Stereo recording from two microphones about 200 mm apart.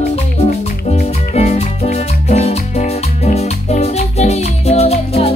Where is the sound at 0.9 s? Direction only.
35° left (ahead or behind).